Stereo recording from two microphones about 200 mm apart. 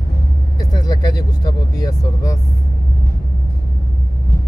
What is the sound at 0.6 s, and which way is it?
Speech, 20° left (ahead or behind).